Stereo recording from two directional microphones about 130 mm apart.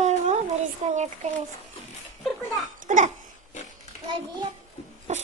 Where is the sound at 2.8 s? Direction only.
80° right.